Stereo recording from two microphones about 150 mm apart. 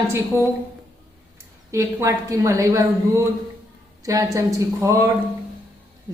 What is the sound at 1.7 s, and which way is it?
A woman's voice, 20° right (ahead or behind).